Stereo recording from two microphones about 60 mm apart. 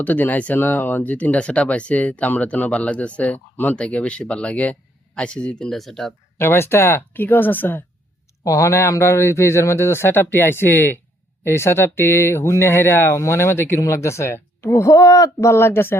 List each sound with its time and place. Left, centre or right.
0.0 s speech: left
3.8 s speech: centre
6.3 s speech: left
8.4 s speech: left
11.4 s speech: left